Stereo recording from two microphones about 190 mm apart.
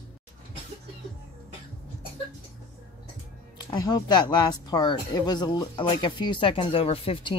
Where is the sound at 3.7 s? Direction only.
20° left (ahead or behind).